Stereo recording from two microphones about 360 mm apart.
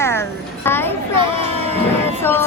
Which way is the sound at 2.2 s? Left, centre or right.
Centre.